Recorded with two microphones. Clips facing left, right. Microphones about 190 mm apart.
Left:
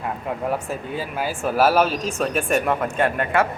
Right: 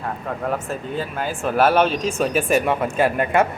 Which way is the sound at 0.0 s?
10° left (ahead or behind).